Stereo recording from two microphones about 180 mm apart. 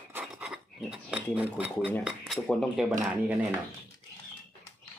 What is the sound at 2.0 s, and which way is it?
Speech, centre (ahead or behind).